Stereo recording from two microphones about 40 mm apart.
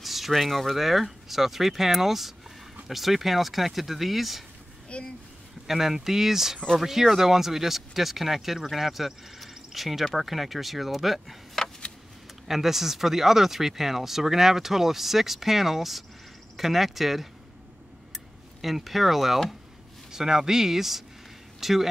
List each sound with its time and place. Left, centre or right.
0.0 s speech: centre
4.8 s speech: left
5.7 s speech: centre
11.6 s vehicle: centre
12.4 s speech: centre
18.6 s speech: centre